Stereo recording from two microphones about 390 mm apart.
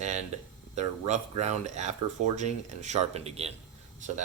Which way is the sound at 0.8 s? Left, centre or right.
Centre.